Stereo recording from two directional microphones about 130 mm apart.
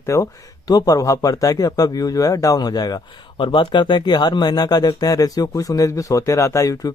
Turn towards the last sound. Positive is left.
turn(degrees=25)  # may be behind; listen again after turning